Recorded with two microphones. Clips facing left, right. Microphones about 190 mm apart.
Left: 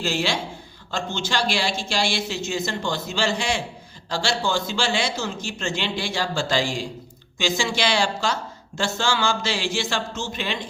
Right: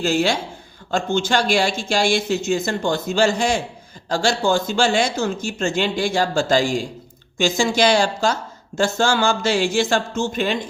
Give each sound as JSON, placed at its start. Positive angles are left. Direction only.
{"t": 0.0, "sound": "speech", "side_deg": -45}